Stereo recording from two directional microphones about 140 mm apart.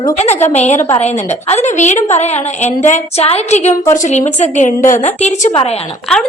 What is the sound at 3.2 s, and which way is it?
A woman's voice, 50° left (ahead or behind).